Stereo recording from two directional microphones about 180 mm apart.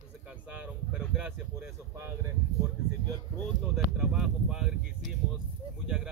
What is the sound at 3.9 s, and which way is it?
Speech, centre (ahead or behind).